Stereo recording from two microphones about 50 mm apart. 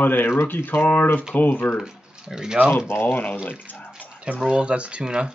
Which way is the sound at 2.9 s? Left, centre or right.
Left.